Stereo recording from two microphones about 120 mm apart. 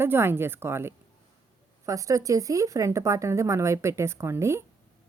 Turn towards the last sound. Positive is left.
turn(degrees=-20)  # may be behind; listen again after turning